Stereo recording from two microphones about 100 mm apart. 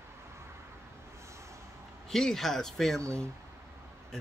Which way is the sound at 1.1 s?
30° right (ahead or behind).